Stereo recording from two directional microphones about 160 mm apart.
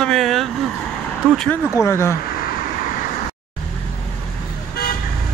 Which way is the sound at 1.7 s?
15° left (ahead or behind).